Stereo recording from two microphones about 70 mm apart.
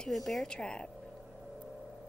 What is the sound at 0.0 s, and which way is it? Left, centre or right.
Speech, centre.